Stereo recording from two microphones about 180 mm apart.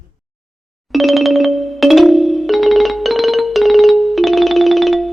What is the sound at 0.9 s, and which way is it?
Music, centre (ahead or behind).